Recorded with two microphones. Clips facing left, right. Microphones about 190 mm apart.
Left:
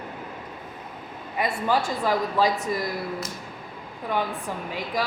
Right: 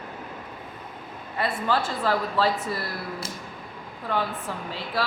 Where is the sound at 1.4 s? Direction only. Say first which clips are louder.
Left 1 dB; 15° left (ahead or behind).